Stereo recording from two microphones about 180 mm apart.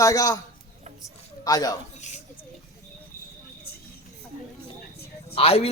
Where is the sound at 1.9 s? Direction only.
40° left (ahead or behind).